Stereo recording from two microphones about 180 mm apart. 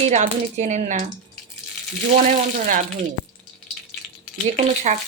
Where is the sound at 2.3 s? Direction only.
45° right (ahead or behind).